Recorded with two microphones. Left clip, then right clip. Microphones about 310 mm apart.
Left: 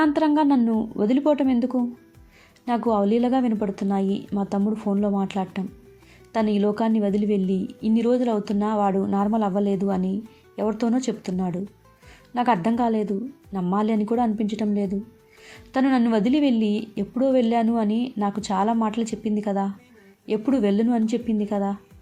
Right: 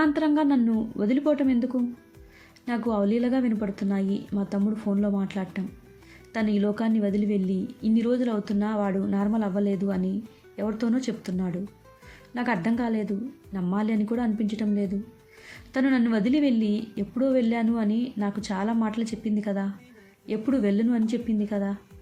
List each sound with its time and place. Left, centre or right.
0.0 s speech: centre